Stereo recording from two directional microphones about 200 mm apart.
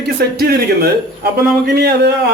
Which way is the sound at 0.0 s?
55° right (ahead or behind).